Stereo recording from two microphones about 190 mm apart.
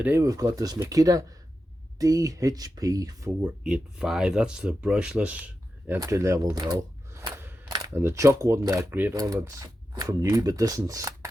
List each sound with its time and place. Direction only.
0.0 s speech: 15° right (ahead or behind)
3.4 s speech: 5° right (ahead or behind)